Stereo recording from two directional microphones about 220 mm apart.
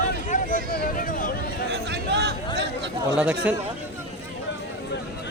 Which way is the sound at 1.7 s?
50° right (ahead or behind).